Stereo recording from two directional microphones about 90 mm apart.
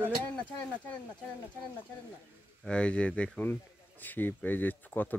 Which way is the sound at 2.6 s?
10° left (ahead or behind).